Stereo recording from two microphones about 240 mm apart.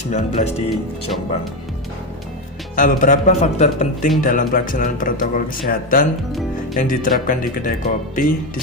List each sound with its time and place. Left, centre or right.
0.1 s speech: left
2.7 s speech: left